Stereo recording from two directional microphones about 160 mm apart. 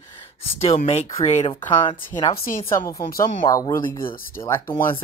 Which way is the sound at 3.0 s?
65° left (ahead or behind).